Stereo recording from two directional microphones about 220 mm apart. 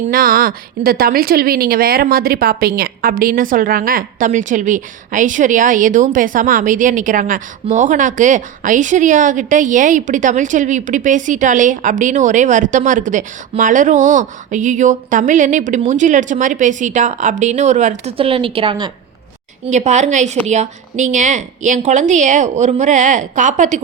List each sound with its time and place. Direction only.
0.1 s a woman's voice: 40° right (ahead or behind)